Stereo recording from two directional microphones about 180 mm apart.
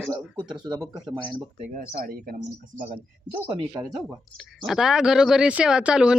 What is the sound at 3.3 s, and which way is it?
Speech, 20° right (ahead or behind).